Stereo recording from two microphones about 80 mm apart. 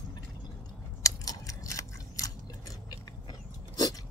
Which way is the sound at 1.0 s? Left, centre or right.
Left.